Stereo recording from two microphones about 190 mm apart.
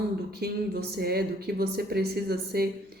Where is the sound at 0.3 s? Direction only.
55° right (ahead or behind).